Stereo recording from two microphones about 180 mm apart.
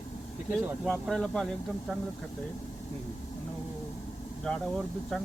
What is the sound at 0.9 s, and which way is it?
Speech, 5° left (ahead or behind).